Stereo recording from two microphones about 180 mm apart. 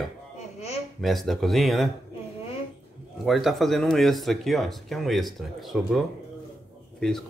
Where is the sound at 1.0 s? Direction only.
Centre (ahead or behind).